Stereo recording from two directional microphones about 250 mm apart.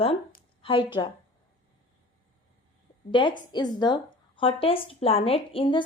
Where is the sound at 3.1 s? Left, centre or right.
Centre.